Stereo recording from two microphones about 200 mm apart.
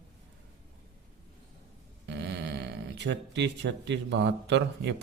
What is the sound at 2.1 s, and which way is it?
Speech, 60° right (ahead or behind).